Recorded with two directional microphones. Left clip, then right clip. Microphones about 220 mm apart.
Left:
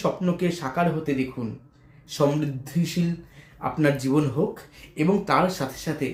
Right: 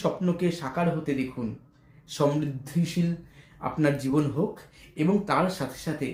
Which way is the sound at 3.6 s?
5° left (ahead or behind).